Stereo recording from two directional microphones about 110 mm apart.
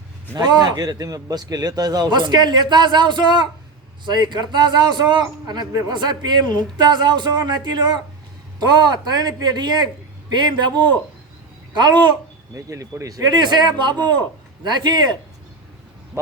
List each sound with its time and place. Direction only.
0.3 s a man's voice: 40° right (ahead or behind)
12.5 s a man's voice: 30° right (ahead or behind)